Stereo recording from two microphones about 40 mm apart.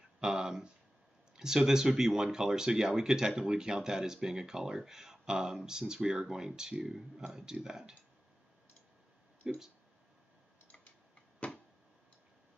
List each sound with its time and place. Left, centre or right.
0.2 s speech: centre
9.5 s speech: centre
11.3 s a sound: left